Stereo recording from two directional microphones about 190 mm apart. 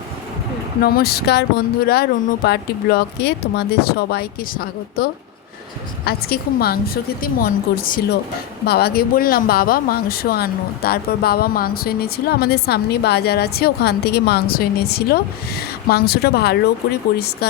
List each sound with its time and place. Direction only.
0.8 s a woman's voice: 55° left (ahead or behind)